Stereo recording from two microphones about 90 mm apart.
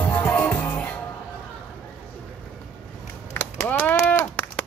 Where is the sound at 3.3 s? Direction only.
20° left (ahead or behind).